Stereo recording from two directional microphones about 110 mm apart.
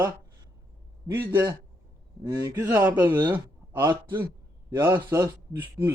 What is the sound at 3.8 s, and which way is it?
Speech, 20° right (ahead or behind).